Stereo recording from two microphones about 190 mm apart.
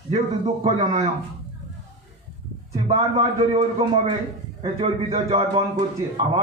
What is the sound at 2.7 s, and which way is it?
A man's voice, 35° right (ahead or behind).